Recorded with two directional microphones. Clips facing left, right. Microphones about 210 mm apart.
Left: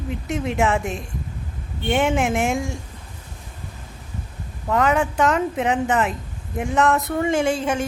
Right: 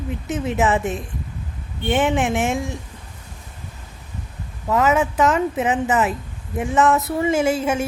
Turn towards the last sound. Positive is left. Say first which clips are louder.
# right 1 dB
turn(degrees=-5)  # may be behind; listen again after turning